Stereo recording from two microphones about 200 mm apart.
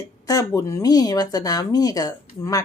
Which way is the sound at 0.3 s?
15° left (ahead or behind).